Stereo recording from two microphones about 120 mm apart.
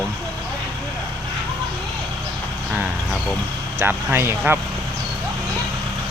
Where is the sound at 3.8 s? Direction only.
20° right (ahead or behind).